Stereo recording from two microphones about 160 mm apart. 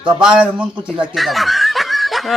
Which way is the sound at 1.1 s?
Centre (ahead or behind).